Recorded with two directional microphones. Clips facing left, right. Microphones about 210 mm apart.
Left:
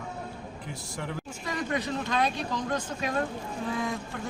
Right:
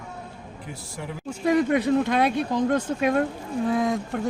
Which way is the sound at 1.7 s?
55° right (ahead or behind).